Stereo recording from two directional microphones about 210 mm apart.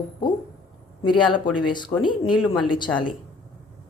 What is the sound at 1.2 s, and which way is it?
A woman's voice, 20° left (ahead or behind).